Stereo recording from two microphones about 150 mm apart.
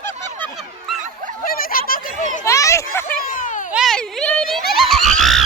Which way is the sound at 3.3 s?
60° left (ahead or behind).